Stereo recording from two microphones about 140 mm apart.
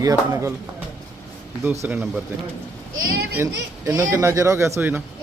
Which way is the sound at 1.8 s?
10° right (ahead or behind).